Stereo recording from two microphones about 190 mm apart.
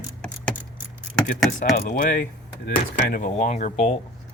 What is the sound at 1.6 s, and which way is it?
Speech, 45° left (ahead or behind).